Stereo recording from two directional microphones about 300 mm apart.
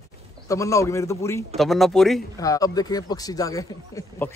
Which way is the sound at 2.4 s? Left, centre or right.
Centre.